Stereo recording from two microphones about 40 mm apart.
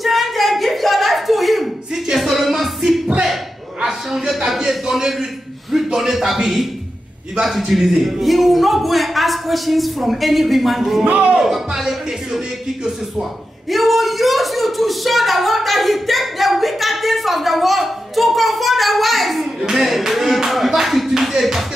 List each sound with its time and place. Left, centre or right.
0.0 s a sound: centre
2.0 s music: centre
3.8 s a sound: centre
4.6 s a man's voice: centre
11.1 s speech: right
11.3 s speech: centre
13.7 s speech: centre